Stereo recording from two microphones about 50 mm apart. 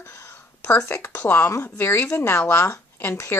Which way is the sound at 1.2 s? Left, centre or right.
Left.